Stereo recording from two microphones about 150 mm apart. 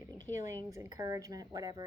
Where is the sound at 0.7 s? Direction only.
20° right (ahead or behind).